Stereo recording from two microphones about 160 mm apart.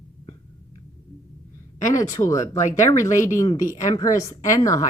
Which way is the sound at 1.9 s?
20° left (ahead or behind).